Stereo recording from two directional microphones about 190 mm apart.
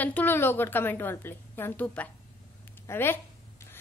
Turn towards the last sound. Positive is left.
turn(degrees=10)  # may be behind; listen again after turning